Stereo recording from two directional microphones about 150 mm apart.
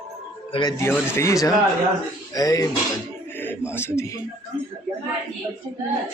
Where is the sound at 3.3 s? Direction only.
15° left (ahead or behind).